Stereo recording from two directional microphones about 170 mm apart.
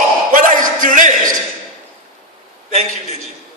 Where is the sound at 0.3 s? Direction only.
50° right (ahead or behind).